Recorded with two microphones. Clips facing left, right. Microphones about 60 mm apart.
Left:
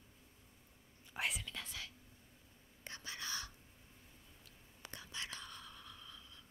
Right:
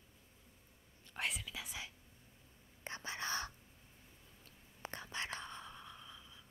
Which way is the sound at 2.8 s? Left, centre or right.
Right.